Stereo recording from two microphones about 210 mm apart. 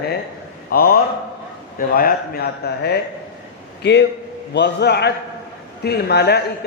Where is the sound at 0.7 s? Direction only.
45° left (ahead or behind).